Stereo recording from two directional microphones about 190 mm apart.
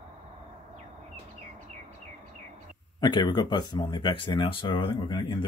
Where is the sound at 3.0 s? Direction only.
20° left (ahead or behind).